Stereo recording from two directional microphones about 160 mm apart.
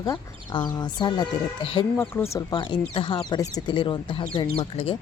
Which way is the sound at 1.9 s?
10° left (ahead or behind).